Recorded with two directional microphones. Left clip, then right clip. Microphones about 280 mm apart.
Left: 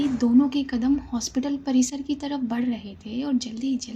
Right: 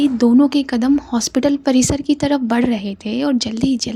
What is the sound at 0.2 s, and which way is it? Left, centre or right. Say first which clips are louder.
A woman's voice: right 6 dB; right.